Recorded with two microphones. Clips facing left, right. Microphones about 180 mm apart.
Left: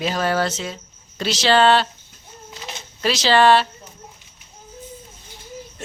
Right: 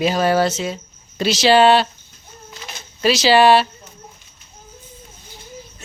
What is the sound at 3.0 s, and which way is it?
Speech, 10° right (ahead or behind).